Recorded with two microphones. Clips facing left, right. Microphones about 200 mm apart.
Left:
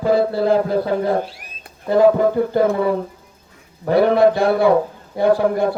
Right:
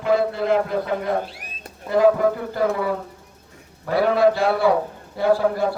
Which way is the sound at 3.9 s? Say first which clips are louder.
Left 4 dB; 25° left (ahead or behind).